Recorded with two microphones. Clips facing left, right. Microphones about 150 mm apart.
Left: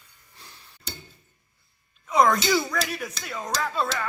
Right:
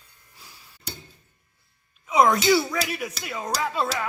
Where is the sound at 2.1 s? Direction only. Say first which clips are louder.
Right 2 dB; 10° right (ahead or behind).